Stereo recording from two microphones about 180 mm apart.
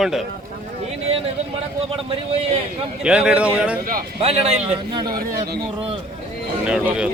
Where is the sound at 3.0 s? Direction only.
5° right (ahead or behind).